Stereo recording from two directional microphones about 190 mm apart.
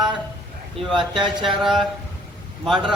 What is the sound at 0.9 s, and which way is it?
Speech, 25° right (ahead or behind).